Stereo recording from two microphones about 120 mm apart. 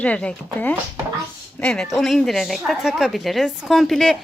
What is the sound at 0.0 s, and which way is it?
A woman's voice, 10° left (ahead or behind).